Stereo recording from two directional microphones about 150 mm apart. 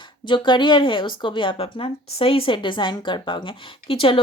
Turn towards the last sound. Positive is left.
turn(degrees=35)  # may be behind; listen again after turning